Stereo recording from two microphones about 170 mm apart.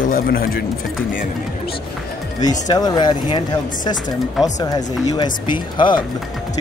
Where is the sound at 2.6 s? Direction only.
25° left (ahead or behind).